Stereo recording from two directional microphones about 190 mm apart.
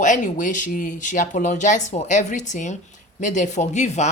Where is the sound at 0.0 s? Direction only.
45° left (ahead or behind).